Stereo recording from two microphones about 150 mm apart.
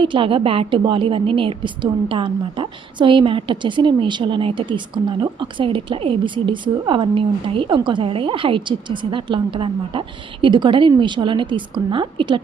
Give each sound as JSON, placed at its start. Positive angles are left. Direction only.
{"t": 0.0, "sound": "a woman's voice", "side_deg": -35}